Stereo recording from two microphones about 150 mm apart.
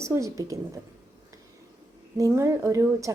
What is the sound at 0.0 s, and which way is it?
Speech, 20° right (ahead or behind).